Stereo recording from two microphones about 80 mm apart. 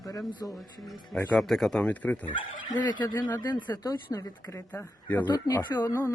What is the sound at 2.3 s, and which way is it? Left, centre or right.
Speech, left.